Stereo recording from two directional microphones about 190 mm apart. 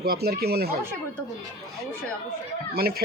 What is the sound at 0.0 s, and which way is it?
Speech, 55° right (ahead or behind).